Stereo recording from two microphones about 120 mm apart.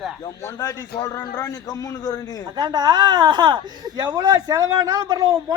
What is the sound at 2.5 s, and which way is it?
Speech, 35° right (ahead or behind).